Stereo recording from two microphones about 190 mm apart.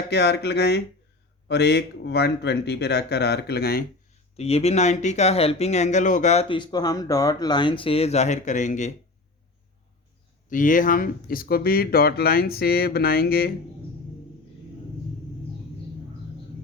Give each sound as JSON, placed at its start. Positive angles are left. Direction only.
{"t": 0.1, "sound": "speech", "side_deg": 60}
{"t": 4.4, "sound": "speech", "side_deg": 35}
{"t": 10.5, "sound": "speech", "side_deg": 45}